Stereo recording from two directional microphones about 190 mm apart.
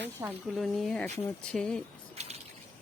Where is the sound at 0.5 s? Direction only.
Centre (ahead or behind).